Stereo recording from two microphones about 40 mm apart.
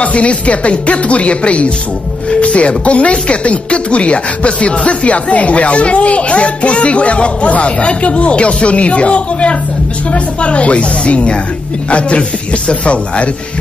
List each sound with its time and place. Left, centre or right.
0.0 s speech: left